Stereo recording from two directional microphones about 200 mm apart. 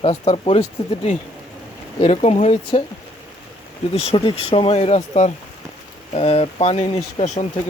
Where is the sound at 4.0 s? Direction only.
25° left (ahead or behind).